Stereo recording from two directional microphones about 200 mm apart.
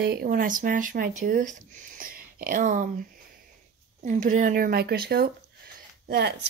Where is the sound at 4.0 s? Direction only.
40° right (ahead or behind).